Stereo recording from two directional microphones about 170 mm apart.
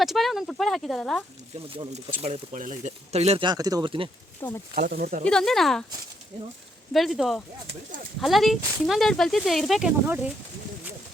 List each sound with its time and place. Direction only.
0.0 s speech: centre (ahead or behind)
1.5 s speech: 35° right (ahead or behind)
3.4 s speech: 20° right (ahead or behind)
4.4 s speech: 15° left (ahead or behind)
4.7 s speech: 60° right (ahead or behind)
5.2 s speech: 5° left (ahead or behind)
6.9 s speech: centre (ahead or behind)